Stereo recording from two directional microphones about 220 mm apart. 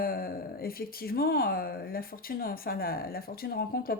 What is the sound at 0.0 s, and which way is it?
Speech, 45° left (ahead or behind).